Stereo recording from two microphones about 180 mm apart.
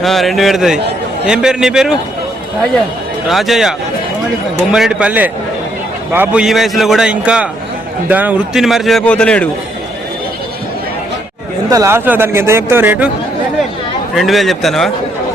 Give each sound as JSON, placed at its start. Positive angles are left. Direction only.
{"t": 0.0, "sound": "a man's voice", "side_deg": 0}
{"t": 3.2, "sound": "a man's voice", "side_deg": 0}
{"t": 11.7, "sound": "speech", "side_deg": -15}
{"t": 14.2, "sound": "a man's voice", "side_deg": 0}